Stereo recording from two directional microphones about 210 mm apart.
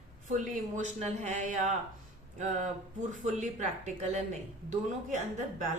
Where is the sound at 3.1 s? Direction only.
35° right (ahead or behind).